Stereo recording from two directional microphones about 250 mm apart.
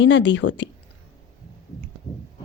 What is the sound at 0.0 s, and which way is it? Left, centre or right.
Speech, left.